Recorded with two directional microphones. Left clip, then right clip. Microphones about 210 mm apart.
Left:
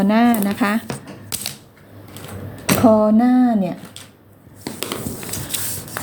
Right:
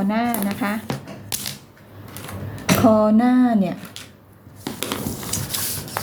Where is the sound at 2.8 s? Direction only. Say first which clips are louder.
Left 2 dB; 20° left (ahead or behind).